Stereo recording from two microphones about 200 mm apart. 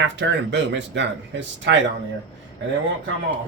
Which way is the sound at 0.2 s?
60° right (ahead or behind).